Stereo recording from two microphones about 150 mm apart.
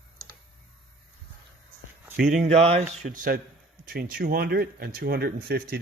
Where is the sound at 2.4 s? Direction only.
45° right (ahead or behind).